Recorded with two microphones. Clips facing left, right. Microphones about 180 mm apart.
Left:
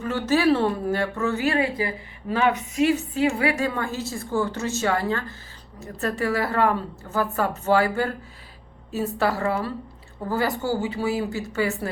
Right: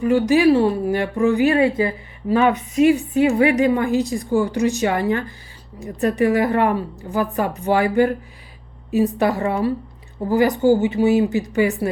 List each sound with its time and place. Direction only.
0.0 s a woman's voice: 15° right (ahead or behind)